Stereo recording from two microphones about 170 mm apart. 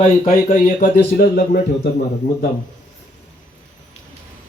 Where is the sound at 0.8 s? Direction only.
60° left (ahead or behind).